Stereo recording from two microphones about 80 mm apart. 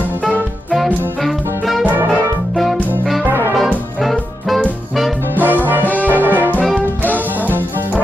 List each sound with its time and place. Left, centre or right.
2.5 s music: centre
3.3 s brass instrument: right
3.5 s brass instrument: centre
5.3 s music: right
5.7 s brass instrument: right
7.4 s music: right